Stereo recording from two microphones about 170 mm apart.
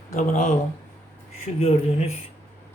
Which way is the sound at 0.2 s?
45° left (ahead or behind).